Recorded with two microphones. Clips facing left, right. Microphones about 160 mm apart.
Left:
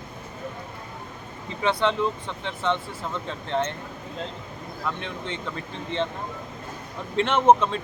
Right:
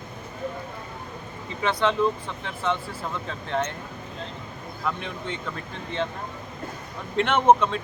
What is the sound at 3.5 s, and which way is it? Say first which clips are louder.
Speech: left 1 dB; 30° left (ahead or behind).